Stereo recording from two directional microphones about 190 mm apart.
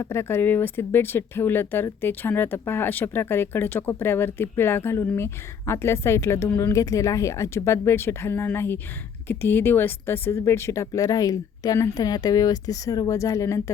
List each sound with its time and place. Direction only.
0.0 s speech: 15° left (ahead or behind)